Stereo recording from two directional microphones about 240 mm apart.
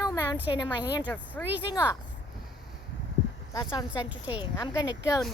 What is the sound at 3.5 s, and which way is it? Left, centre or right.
Speech, centre.